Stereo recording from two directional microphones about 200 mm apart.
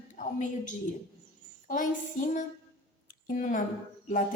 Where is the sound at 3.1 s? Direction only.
40° left (ahead or behind).